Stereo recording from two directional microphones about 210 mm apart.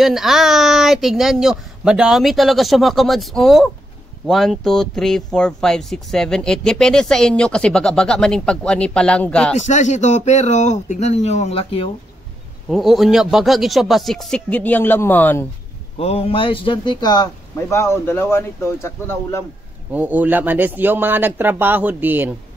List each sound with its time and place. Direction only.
0.0 s speech: centre (ahead or behind)
9.6 s speech: 35° left (ahead or behind)
12.6 s speech: centre (ahead or behind)
16.0 s speech: 25° left (ahead or behind)
19.9 s a man's voice: 5° right (ahead or behind)